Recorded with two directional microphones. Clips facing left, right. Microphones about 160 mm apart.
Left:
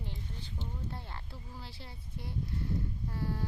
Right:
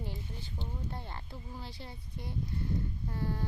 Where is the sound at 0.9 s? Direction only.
Centre (ahead or behind).